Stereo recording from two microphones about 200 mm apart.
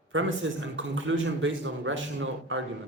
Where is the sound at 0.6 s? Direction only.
70° right (ahead or behind).